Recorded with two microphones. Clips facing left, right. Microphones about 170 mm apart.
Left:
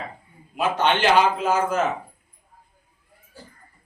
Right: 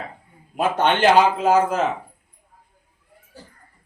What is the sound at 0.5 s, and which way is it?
Speech, 55° right (ahead or behind).